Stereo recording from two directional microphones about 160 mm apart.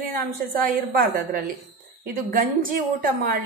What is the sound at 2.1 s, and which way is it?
A woman's voice, 60° right (ahead or behind).